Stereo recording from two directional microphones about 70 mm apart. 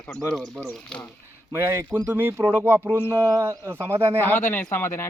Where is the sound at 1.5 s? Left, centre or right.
Right.